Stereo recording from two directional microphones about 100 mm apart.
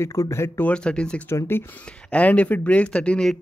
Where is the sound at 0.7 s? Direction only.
10° left (ahead or behind).